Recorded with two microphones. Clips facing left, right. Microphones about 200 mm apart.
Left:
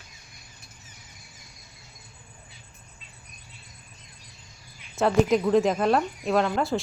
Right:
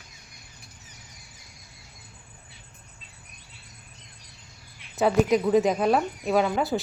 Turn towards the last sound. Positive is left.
turn(degrees=-5)  # may be behind; listen again after turning